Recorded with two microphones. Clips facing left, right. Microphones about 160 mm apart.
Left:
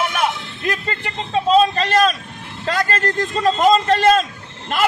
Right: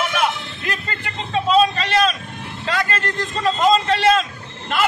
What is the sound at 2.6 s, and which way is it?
A man's voice, 40° left (ahead or behind).